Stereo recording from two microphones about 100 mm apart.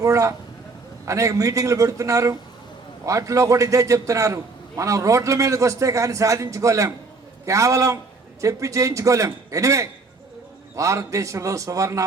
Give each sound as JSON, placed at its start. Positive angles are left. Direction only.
{"t": 0.0, "sound": "a man's voice", "side_deg": -30}